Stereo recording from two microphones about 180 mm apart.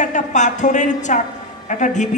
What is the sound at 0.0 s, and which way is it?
A man's voice, 45° left (ahead or behind).